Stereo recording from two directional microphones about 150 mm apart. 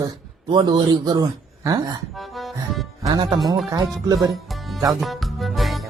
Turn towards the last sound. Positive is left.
turn(degrees=0)  # may be behind; listen again after turning